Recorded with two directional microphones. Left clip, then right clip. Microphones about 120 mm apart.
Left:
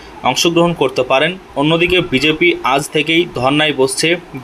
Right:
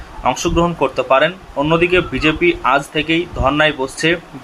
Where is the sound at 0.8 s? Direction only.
35° left (ahead or behind).